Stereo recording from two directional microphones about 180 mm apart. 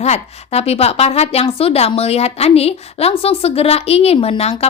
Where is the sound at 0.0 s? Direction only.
35° left (ahead or behind).